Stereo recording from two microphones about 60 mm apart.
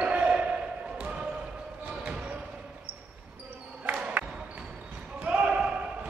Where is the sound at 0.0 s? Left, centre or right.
Right.